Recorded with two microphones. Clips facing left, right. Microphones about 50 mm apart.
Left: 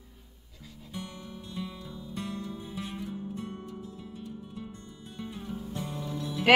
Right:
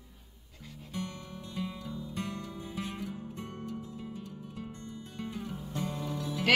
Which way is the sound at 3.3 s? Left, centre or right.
Right.